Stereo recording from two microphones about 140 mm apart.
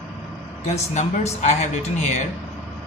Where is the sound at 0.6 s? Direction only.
50° left (ahead or behind).